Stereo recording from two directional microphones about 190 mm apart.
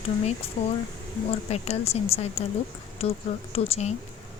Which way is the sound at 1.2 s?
35° left (ahead or behind).